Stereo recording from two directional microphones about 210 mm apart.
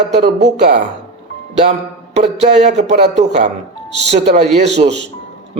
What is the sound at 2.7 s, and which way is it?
Speech, 30° right (ahead or behind).